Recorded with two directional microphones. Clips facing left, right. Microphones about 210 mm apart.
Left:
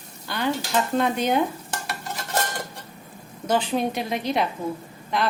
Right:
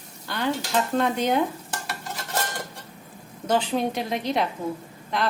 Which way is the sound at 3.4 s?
10° left (ahead or behind).